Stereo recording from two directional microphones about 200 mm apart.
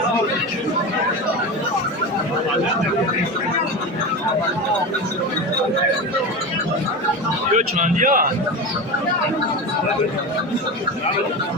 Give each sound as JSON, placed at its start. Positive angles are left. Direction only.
{"t": 7.5, "sound": "a man's voice", "side_deg": -40}